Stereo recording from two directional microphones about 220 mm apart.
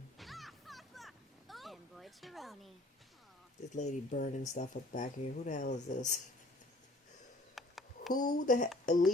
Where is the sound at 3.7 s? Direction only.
35° left (ahead or behind).